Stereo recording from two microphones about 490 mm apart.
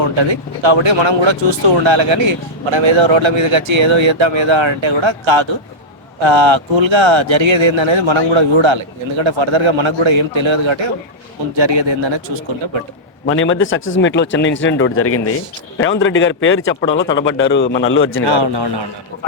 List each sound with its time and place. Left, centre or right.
0.2 s speech: right
13.2 s speech: left
18.3 s speech: right